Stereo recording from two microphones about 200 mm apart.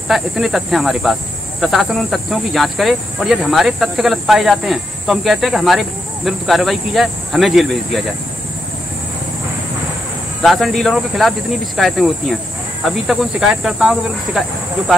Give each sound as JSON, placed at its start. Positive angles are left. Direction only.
{"t": 0.1, "sound": "cricket", "side_deg": 0}
{"t": 10.4, "sound": "cricket", "side_deg": 0}